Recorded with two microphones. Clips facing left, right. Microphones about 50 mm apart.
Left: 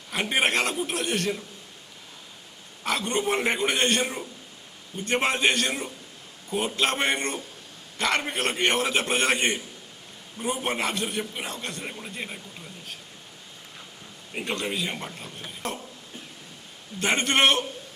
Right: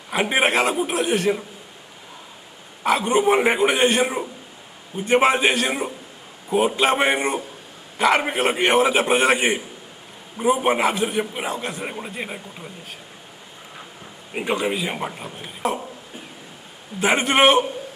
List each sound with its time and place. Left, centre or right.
0.1 s a man's voice: centre
2.8 s a man's voice: centre
14.3 s a man's voice: centre
17.0 s a man's voice: centre